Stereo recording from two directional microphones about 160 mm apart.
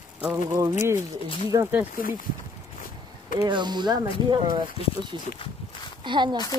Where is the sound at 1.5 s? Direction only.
25° right (ahead or behind).